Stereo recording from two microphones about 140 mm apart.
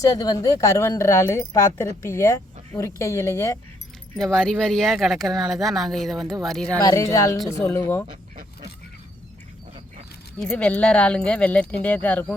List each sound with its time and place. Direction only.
0.0 s speech: 25° left (ahead or behind)
4.2 s speech: 5° left (ahead or behind)
6.8 s speech: 25° left (ahead or behind)
10.4 s speech: 10° left (ahead or behind)